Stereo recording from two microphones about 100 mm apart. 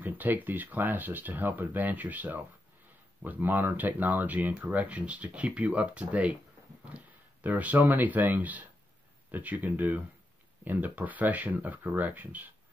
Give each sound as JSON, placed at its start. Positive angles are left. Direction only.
{"t": 0.0, "sound": "speech", "side_deg": -15}
{"t": 7.4, "sound": "speech", "side_deg": -15}